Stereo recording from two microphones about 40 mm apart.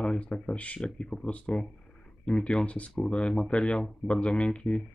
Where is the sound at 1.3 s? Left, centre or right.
Left.